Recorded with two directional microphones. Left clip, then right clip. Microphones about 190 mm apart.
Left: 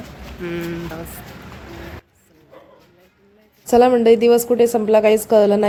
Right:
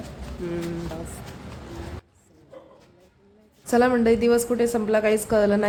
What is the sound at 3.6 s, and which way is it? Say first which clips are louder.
A woman's voice: left 7 dB; 20° left (ahead or behind).